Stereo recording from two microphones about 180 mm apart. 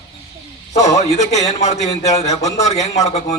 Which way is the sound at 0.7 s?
40° left (ahead or behind).